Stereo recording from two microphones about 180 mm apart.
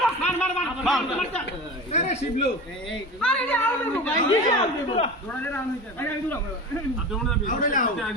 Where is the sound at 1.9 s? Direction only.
40° left (ahead or behind).